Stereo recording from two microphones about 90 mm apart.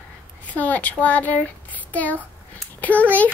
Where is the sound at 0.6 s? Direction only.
20° left (ahead or behind).